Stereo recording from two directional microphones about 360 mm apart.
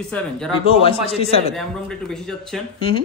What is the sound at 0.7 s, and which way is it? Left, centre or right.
Speech, centre.